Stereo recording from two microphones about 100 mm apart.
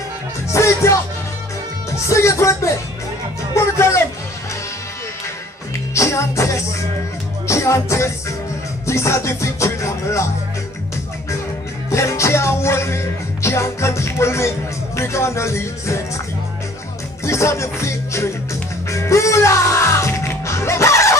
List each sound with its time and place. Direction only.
0.5 s music: 30° left (ahead or behind)
2.0 s music: 30° left (ahead or behind)
3.5 s speech: 30° left (ahead or behind)
5.9 s music: 30° left (ahead or behind)
11.9 s music: 30° left (ahead or behind)
17.2 s music: 30° left (ahead or behind)